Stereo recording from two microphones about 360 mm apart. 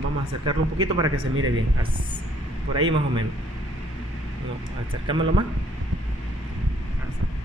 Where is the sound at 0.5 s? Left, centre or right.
Centre.